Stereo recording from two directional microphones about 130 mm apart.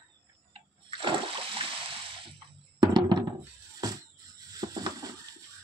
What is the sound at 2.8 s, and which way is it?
Music, 35° right (ahead or behind).